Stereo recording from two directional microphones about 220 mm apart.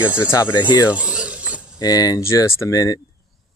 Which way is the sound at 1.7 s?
15° left (ahead or behind).